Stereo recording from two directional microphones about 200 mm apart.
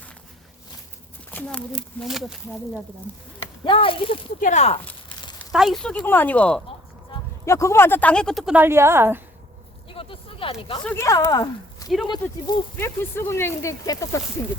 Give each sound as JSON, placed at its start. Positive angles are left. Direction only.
{"t": 1.3, "sound": "speech", "side_deg": 5}
{"t": 3.1, "sound": "speech", "side_deg": 10}
{"t": 3.6, "sound": "speech", "side_deg": 25}
{"t": 4.4, "sound": "speech", "side_deg": 40}
{"t": 5.5, "sound": "speech", "side_deg": 0}
{"t": 9.9, "sound": "a sound", "side_deg": 25}
{"t": 10.8, "sound": "speech", "side_deg": 15}
{"t": 12.7, "sound": "speech", "side_deg": 10}